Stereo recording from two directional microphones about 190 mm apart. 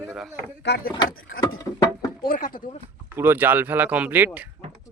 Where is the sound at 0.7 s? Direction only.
65° left (ahead or behind).